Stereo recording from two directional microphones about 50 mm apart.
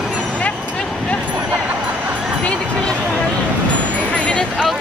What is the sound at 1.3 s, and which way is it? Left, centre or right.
Vehicle, right.